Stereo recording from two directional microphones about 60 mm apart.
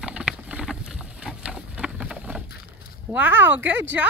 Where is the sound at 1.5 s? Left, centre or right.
Centre.